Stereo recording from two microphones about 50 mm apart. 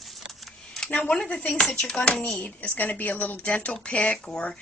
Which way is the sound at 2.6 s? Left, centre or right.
Left.